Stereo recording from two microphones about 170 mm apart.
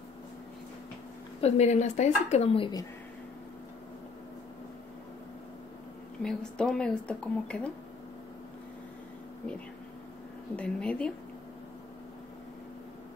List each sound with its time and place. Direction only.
1.4 s a woman's voice: 40° left (ahead or behind)
6.2 s a woman's voice: 5° left (ahead or behind)
10.5 s a woman's voice: 5° left (ahead or behind)